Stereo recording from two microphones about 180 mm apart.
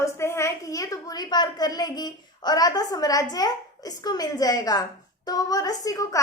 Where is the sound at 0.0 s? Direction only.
15° left (ahead or behind).